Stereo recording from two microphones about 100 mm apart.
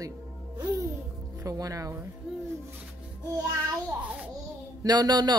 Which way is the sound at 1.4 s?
35° right (ahead or behind).